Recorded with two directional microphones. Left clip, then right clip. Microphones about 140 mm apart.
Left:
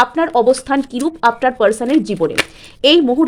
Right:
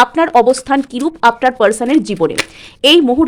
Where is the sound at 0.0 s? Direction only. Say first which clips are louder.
Right 3 dB; 15° right (ahead or behind).